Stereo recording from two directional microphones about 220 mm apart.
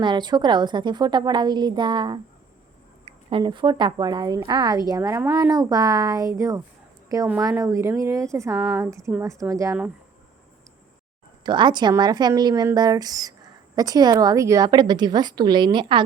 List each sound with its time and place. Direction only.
0.0 s speech: 20° right (ahead or behind)
8.5 s a woman's voice: centre (ahead or behind)
9.0 s speech: 15° right (ahead or behind)
11.4 s speech: 20° right (ahead or behind)